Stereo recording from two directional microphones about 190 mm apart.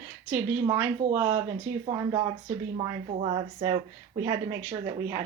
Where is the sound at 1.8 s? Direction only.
20° right (ahead or behind).